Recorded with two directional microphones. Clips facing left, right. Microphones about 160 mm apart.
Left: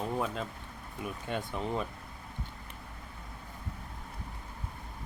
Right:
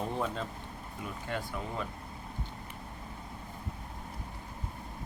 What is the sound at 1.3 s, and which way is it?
Speech, 20° left (ahead or behind).